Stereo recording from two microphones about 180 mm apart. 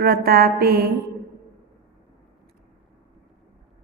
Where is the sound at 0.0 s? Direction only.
60° right (ahead or behind).